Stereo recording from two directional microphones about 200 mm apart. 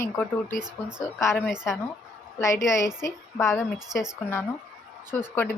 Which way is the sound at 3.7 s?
5° right (ahead or behind).